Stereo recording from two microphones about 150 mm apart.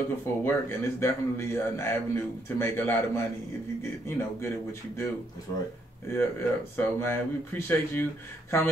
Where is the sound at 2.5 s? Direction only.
15° left (ahead or behind).